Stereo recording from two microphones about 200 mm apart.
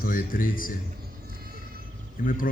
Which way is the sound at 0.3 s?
45° left (ahead or behind).